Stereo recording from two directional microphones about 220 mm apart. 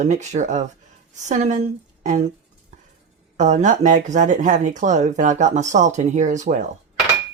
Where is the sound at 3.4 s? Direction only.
30° right (ahead or behind).